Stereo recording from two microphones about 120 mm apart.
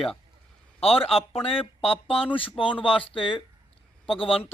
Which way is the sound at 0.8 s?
55° left (ahead or behind).